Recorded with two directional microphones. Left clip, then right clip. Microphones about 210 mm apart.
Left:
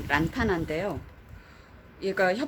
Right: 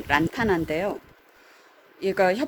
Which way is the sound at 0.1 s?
35° right (ahead or behind).